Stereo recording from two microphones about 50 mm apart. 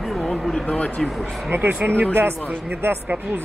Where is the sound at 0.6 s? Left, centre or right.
Left.